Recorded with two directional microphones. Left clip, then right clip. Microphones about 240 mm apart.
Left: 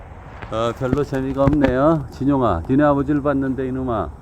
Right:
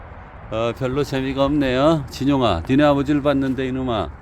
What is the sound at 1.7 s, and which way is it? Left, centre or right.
Speech, right.